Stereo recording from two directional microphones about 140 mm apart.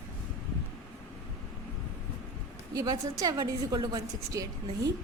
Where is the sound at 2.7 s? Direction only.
25° right (ahead or behind).